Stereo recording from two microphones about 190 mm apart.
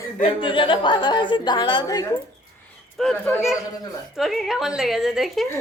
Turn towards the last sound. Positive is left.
turn(degrees=0)  # may be behind; listen again after turning